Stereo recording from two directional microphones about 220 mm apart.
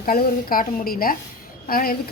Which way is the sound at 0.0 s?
40° left (ahead or behind).